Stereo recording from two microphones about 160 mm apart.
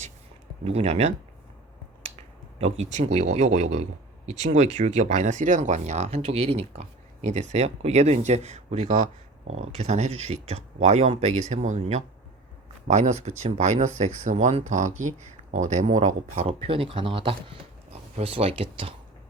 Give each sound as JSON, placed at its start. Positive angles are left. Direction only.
{"t": 0.6, "sound": "speech", "side_deg": -40}